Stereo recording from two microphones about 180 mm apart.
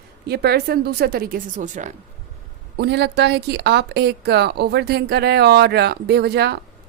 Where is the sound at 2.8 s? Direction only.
65° right (ahead or behind).